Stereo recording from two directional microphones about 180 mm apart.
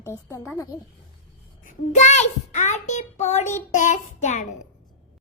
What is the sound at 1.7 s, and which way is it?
A child's voice, 40° left (ahead or behind).